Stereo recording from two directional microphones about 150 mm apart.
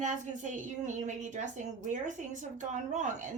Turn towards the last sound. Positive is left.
turn(degrees=-55)  # may be behind; listen again after turning